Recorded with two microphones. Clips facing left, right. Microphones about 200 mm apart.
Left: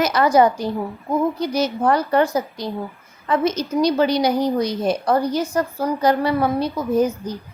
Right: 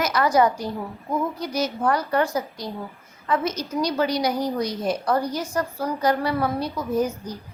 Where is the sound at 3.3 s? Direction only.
25° left (ahead or behind).